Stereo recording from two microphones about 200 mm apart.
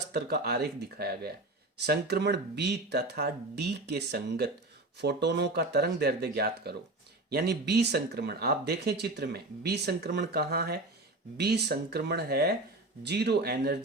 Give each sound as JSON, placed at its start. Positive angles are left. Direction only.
{"t": 0.1, "sound": "speech", "side_deg": -55}